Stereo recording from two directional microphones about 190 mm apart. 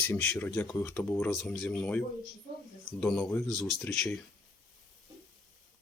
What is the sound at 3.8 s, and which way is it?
Speech, 15° left (ahead or behind).